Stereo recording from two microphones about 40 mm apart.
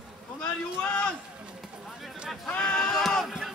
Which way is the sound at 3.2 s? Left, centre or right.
Centre.